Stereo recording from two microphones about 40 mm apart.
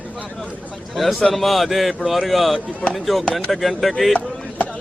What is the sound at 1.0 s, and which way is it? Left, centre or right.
A man's voice, centre.